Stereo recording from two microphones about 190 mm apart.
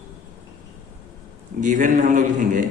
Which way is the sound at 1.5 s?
40° right (ahead or behind).